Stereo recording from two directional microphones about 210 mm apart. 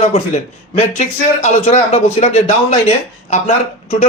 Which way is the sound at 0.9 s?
35° left (ahead or behind).